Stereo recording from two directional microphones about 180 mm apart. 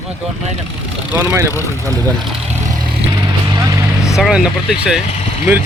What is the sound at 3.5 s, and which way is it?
Vehicle, 20° right (ahead or behind).